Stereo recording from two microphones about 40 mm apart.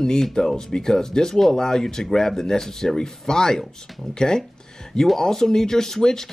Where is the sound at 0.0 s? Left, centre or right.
Centre.